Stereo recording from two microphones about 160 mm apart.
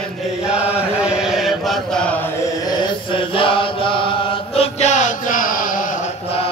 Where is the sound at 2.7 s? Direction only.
30° left (ahead or behind).